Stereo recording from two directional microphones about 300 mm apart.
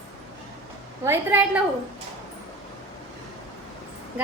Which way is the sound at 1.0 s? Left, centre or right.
Centre.